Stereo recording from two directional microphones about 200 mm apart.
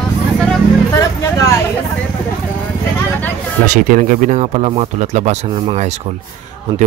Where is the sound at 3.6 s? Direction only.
40° right (ahead or behind).